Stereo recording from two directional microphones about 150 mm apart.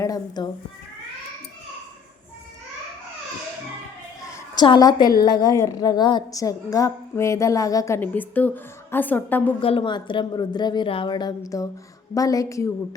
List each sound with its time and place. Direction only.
0.0 s a woman's voice: 25° left (ahead or behind)
4.5 s a woman's voice: 30° left (ahead or behind); by 9.5 s 10° left (ahead or behind)
9.6 s a woman's voice: 35° left (ahead or behind); by 12.7 s 20° left (ahead or behind)